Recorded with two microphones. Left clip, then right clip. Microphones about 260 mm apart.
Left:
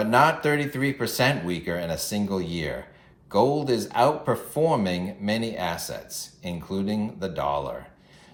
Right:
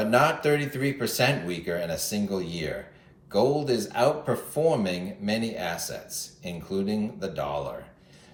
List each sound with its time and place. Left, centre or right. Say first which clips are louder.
0.0 s speech: left 2 dB; centre